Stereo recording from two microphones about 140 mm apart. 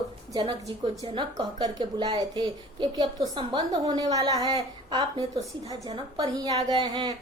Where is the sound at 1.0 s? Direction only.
35° right (ahead or behind).